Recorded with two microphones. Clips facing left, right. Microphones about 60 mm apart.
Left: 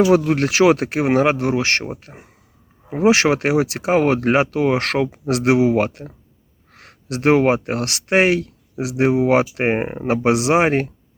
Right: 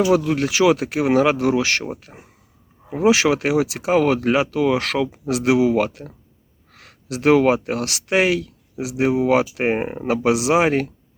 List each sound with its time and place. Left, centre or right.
0.0 s speech: left
0.9 s speech: left
3.1 s speech: left
6.7 s a sound: left
7.3 s speech: left
9.7 s speech: left